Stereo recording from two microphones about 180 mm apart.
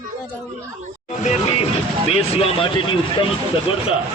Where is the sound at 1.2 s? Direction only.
40° left (ahead or behind).